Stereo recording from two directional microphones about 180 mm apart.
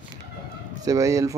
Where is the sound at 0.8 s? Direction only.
20° right (ahead or behind).